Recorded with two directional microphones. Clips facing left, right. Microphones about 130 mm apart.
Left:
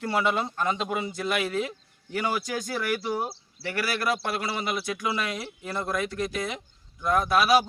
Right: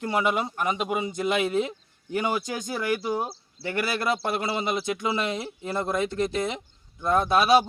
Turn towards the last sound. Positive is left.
turn(degrees=-25)  # may be behind; listen again after turning